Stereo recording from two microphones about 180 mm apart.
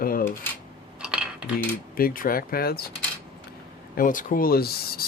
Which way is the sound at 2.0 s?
50° left (ahead or behind).